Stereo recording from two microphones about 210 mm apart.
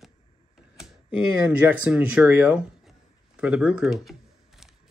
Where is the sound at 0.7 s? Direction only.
5° right (ahead or behind).